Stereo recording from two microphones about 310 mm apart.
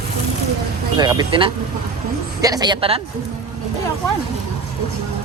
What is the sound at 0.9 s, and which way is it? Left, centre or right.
Speech, centre.